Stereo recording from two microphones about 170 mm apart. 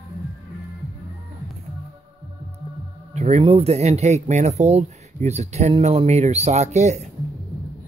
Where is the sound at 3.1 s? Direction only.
40° right (ahead or behind).